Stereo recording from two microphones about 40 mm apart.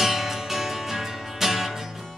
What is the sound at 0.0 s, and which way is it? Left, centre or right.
Music, centre.